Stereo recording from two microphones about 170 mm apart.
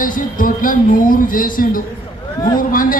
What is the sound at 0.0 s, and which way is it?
Speech, 55° left (ahead or behind).